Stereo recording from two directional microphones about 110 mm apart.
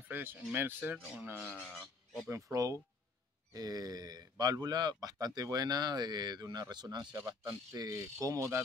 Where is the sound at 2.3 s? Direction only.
30° right (ahead or behind).